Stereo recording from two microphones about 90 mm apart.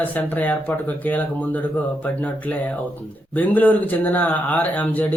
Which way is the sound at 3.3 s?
20° left (ahead or behind).